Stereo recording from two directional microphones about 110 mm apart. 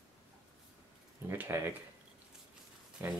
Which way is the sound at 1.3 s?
20° right (ahead or behind).